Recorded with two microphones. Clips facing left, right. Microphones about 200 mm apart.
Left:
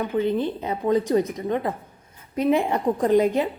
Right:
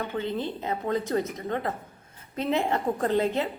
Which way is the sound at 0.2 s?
15° left (ahead or behind).